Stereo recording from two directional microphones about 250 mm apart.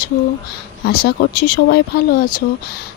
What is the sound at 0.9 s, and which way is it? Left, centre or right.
Speech, left.